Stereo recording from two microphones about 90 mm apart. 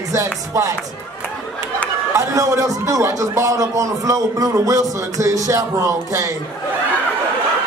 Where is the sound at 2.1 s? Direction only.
35° right (ahead or behind).